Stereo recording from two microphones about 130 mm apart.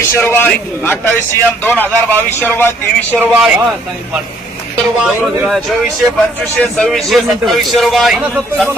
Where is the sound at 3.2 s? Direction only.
5° right (ahead or behind).